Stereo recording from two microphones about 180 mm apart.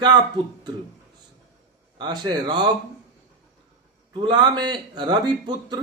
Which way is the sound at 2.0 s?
25° right (ahead or behind).